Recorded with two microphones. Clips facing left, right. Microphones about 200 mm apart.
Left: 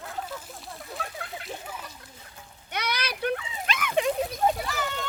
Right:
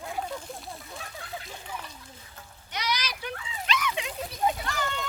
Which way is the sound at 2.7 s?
60° left (ahead or behind).